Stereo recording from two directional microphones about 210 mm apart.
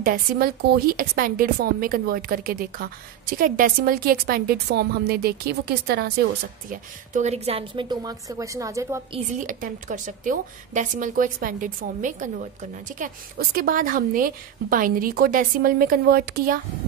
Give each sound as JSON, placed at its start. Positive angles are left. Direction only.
{"t": 0.0, "sound": "speech", "side_deg": -45}
{"t": 6.7, "sound": "a woman's voice", "side_deg": -35}
{"t": 9.4, "sound": "a woman's voice", "side_deg": -40}